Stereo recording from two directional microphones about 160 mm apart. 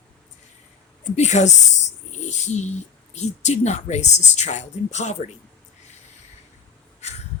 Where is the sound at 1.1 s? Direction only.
45° left (ahead or behind).